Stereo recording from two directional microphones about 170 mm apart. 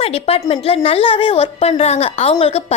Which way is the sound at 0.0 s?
35° left (ahead or behind).